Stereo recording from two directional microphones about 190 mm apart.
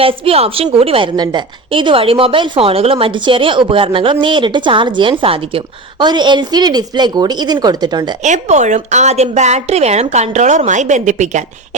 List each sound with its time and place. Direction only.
0.0 s a woman's voice: 30° right (ahead or behind)
8.2 s speech: 40° right (ahead or behind)